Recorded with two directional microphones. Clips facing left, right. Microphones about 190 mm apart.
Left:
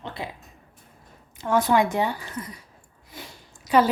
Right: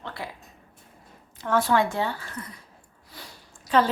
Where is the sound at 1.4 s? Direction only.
15° left (ahead or behind).